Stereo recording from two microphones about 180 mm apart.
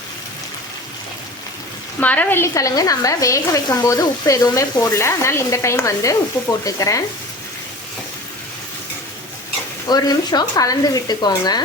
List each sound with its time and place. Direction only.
2.0 s a woman's voice: 10° left (ahead or behind)
9.9 s speech: 20° left (ahead or behind)